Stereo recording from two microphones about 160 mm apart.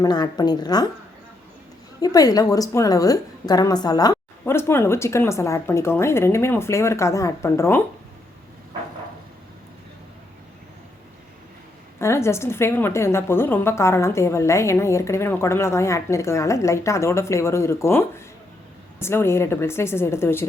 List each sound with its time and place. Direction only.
0.0 s a woman's voice: 25° left (ahead or behind)
2.0 s a woman's voice: 25° left (ahead or behind)
11.9 s a woman's voice: 15° left (ahead or behind)